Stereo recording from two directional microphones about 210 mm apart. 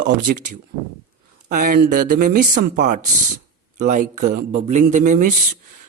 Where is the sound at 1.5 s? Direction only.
40° right (ahead or behind).